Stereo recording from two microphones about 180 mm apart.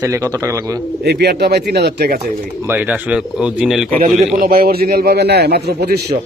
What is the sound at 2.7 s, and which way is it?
Speech, 10° right (ahead or behind).